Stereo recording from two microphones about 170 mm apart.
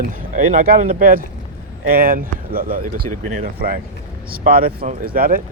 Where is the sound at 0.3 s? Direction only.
45° right (ahead or behind).